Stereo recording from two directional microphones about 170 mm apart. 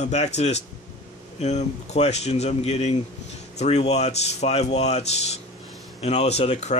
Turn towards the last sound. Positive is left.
turn(degrees=40)  # may be behind; listen again after turning